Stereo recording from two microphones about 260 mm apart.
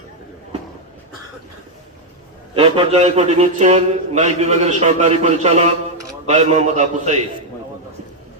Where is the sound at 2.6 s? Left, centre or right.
Right.